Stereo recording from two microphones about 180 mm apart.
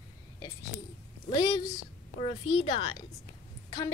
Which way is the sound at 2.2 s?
30° left (ahead or behind).